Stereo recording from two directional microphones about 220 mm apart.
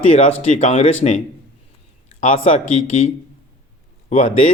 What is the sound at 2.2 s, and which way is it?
A man's voice, 30° left (ahead or behind).